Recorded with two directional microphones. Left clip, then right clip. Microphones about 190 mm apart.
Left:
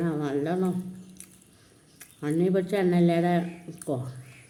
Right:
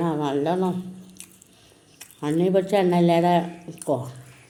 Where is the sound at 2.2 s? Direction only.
20° left (ahead or behind).